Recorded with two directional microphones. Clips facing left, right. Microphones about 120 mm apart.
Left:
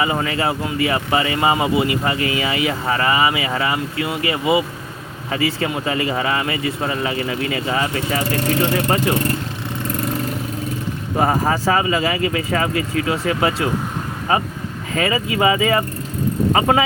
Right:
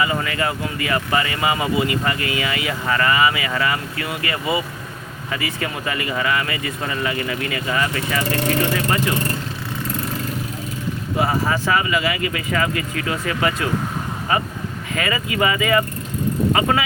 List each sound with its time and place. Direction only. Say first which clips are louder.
0.0 s speech: left 2 dB; 25° left (ahead or behind)
11.2 s speech: left 3 dB; 45° left (ahead or behind)